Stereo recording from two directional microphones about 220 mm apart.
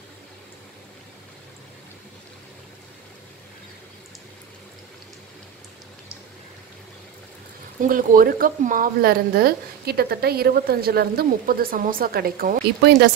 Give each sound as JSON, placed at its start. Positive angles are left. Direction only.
{"t": 7.8, "sound": "speech", "side_deg": -40}